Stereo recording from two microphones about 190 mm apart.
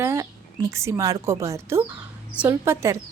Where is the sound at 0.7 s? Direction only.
15° right (ahead or behind).